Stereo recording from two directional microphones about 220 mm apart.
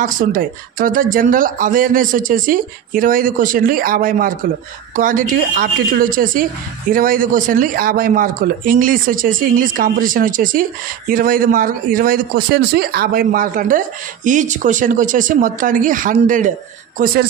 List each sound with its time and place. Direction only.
0.0 s speech: 40° right (ahead or behind)